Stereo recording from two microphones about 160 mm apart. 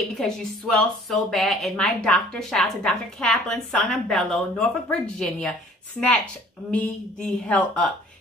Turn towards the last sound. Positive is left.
turn(degrees=10)  # may be behind; listen again after turning